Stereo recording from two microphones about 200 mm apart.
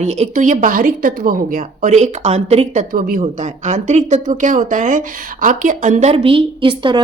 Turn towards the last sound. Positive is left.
turn(degrees=-25)  # may be behind; listen again after turning